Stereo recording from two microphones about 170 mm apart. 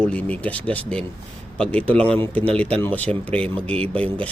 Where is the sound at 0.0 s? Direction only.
10° left (ahead or behind).